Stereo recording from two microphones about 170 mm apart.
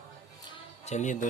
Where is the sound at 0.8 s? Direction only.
45° left (ahead or behind).